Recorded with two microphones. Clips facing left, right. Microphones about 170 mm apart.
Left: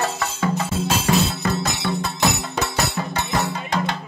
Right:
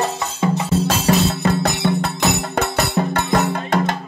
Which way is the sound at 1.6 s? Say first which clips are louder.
Right 5 dB; 60° right (ahead or behind).